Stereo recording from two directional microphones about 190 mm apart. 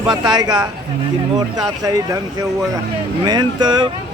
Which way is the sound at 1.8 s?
20° right (ahead or behind).